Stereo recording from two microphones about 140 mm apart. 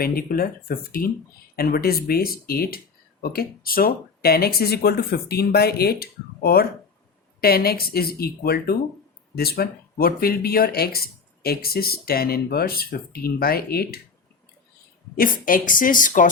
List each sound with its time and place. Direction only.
0.0 s speech: 90° left
15.1 s speech: 85° left; by 16.3 s 70° left (ahead or behind)